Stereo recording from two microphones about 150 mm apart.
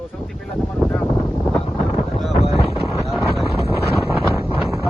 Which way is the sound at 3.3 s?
Centre (ahead or behind).